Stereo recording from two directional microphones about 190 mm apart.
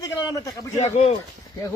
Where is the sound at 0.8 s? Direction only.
35° left (ahead or behind).